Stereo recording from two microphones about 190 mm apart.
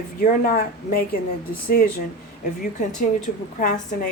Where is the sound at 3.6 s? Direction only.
45° left (ahead or behind).